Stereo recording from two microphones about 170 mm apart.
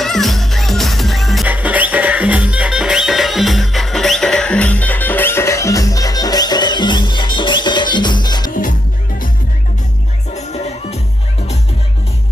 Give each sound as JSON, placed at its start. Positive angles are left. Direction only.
{"t": 0.0, "sound": "music", "side_deg": 0}
{"t": 10.3, "sound": "music", "side_deg": 40}